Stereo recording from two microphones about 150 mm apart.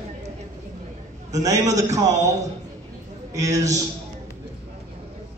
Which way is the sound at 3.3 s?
20° right (ahead or behind).